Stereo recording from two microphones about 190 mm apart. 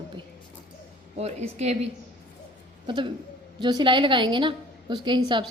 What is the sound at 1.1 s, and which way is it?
A woman's voice, 35° right (ahead or behind).